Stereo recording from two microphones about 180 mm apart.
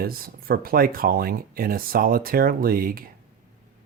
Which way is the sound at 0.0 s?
55° right (ahead or behind).